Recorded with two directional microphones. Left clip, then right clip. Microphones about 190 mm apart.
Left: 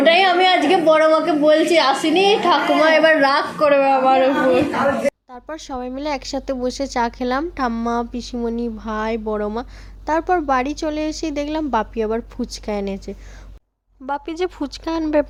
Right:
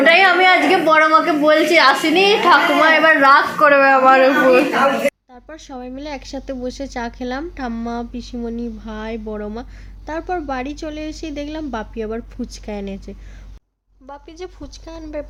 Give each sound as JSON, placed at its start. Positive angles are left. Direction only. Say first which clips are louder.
{"t": 0.0, "sound": "a woman's voice", "louder": "right 2 dB", "side_deg": 15}
{"t": 3.7, "sound": "speech", "louder": "right 3 dB", "side_deg": 5}
{"t": 5.3, "sound": "speech", "louder": "left 5 dB", "side_deg": 25}
{"t": 14.1, "sound": "speech", "louder": "left 11 dB", "side_deg": 40}